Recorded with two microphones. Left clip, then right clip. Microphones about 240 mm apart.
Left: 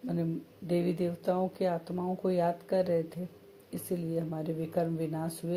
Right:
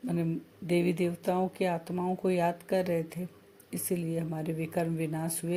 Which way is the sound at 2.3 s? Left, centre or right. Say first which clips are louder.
Even; right.